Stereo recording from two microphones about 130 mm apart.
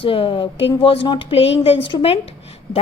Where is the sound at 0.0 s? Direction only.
45° left (ahead or behind).